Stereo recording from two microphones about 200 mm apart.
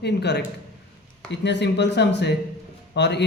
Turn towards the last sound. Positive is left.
turn(degrees=60)  # may be behind; listen again after turning